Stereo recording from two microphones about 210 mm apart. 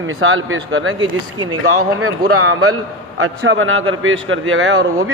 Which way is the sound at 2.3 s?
90° right.